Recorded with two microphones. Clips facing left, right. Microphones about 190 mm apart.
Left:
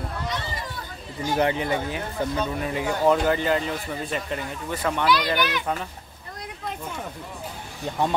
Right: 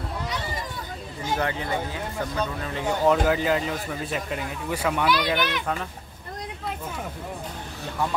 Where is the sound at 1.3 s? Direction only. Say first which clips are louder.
Left 5 dB; 20° left (ahead or behind).